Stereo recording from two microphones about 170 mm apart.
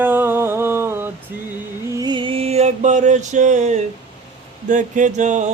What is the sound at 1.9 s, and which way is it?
Music, 25° right (ahead or behind).